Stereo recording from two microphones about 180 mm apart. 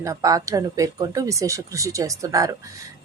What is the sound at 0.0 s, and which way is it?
A woman's voice, 20° right (ahead or behind).